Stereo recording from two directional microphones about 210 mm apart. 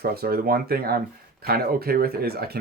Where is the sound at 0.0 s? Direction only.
45° right (ahead or behind).